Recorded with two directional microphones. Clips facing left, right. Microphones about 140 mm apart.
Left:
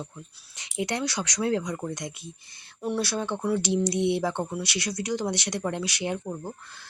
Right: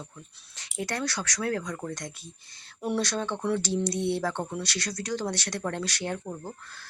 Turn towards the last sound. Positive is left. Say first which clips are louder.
# left 3 dB
turn(degrees=15)  # may be behind; listen again after turning